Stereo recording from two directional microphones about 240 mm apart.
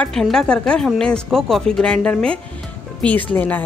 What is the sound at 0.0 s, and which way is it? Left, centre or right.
Speech, centre.